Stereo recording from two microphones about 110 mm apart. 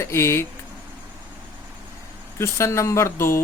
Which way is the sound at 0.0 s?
25° left (ahead or behind).